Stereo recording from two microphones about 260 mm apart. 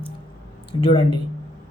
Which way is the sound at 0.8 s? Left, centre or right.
Centre.